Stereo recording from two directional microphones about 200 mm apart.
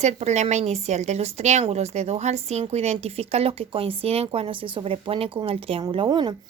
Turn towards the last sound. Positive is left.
turn(degrees=-20)  # may be behind; listen again after turning